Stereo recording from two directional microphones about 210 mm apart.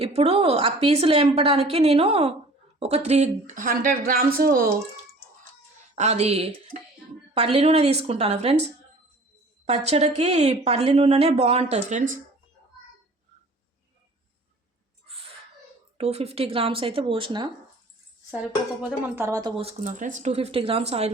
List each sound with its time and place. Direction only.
0.0 s speech: 30° right (ahead or behind); by 4.7 s 45° right (ahead or behind)
5.9 s speech: 30° right (ahead or behind)
9.6 s speech: 30° right (ahead or behind)
16.0 s speech: 30° right (ahead or behind)
18.8 s speech: 10° right (ahead or behind)
19.8 s speech: 40° right (ahead or behind)